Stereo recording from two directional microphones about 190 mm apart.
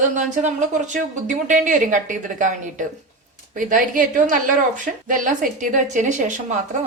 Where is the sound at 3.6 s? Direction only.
45° right (ahead or behind).